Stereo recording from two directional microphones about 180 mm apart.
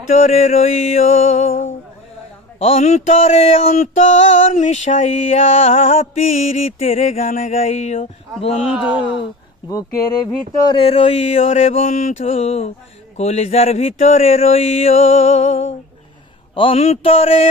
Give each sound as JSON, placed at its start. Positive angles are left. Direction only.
{"t": 0.1, "sound": "mantra", "side_deg": 45}
{"t": 10.7, "sound": "mantra", "side_deg": 30}